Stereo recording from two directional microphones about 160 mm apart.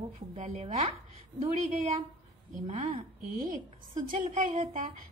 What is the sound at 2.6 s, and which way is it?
Speech, 40° right (ahead or behind).